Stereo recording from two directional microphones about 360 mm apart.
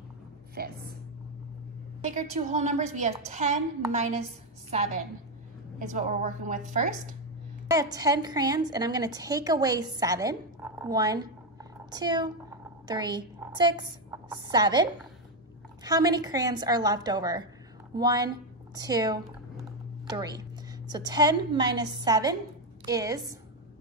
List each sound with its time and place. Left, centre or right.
0.6 s a sound: right
2.0 s a woman's voice: centre
5.8 s a woman's voice: right
7.7 s a woman's voice: centre